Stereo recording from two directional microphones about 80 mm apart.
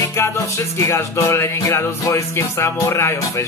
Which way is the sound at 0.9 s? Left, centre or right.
Left.